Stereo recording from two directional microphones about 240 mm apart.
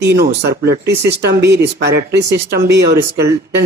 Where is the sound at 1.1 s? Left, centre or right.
Right.